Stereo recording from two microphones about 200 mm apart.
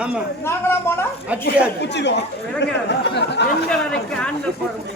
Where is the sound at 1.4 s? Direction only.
60° left (ahead or behind).